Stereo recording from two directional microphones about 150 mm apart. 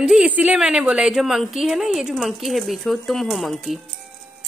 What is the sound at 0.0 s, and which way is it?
A child's voice, 5° right (ahead or behind).